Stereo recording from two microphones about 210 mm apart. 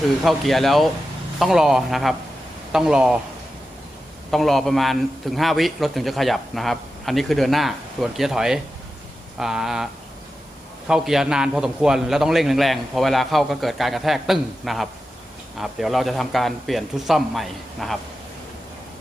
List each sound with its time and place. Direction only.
0.2 s a man's voice: centre (ahead or behind)
4.3 s a man's voice: centre (ahead or behind)